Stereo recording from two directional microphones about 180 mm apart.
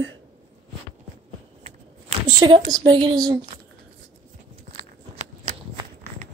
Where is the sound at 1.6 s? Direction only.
30° right (ahead or behind).